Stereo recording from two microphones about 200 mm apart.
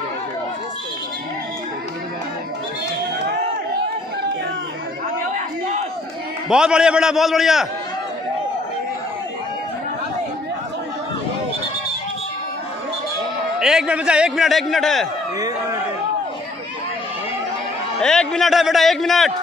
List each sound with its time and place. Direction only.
6.5 s a man's voice: 5° right (ahead or behind)
13.6 s a man's voice: 5° right (ahead or behind)
15.3 s a sound: 20° right (ahead or behind)
18.0 s a man's voice: 5° left (ahead or behind)